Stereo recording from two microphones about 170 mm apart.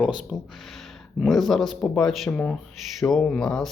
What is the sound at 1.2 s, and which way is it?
Speech, centre (ahead or behind).